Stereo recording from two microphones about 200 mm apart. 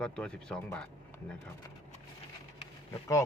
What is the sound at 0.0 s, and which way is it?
Speech, 5° left (ahead or behind).